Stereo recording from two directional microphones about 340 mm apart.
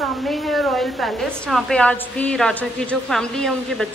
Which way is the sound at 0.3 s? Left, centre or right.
Centre.